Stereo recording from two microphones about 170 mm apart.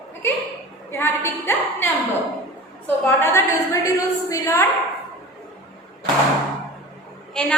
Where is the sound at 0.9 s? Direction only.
15° left (ahead or behind).